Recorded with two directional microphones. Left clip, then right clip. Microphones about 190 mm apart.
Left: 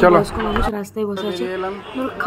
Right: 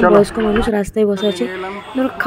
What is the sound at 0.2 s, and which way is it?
A woman's voice, 25° right (ahead or behind).